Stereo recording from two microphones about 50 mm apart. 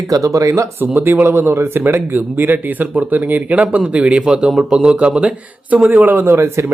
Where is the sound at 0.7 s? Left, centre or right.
Right.